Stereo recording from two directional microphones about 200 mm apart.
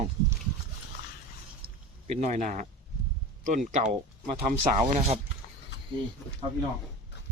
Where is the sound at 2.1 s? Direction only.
35° right (ahead or behind).